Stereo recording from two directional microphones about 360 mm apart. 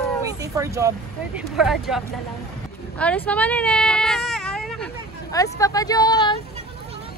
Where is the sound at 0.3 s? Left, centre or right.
Centre.